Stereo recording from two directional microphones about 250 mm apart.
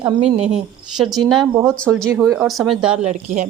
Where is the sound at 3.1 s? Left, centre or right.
Right.